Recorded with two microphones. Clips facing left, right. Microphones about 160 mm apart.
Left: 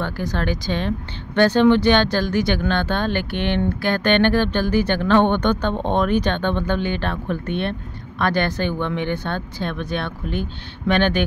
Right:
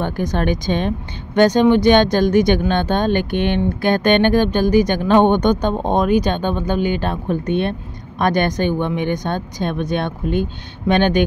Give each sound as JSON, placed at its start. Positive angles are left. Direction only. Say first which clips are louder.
{"t": 0.0, "sound": "speech", "louder": "right 4 dB", "side_deg": -20}